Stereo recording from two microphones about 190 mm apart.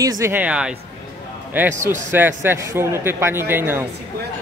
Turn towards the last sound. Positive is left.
turn(degrees=-10)  # may be behind; listen again after turning